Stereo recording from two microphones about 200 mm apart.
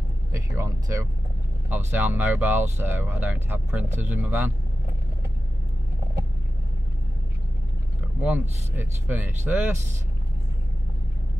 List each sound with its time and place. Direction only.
0.3 s speech: 15° right (ahead or behind)
8.2 s speech: 10° right (ahead or behind)